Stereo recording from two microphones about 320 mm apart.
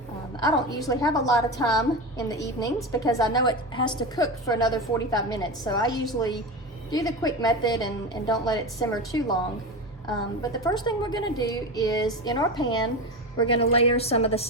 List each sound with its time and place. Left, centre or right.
0.9 s a woman's voice: centre
10.4 s a woman's voice: centre